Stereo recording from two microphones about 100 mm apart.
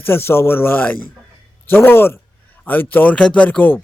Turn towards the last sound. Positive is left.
turn(degrees=15)  # may be behind; listen again after turning